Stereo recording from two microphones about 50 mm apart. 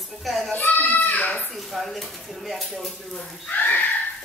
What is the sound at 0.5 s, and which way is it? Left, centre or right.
Speech, left.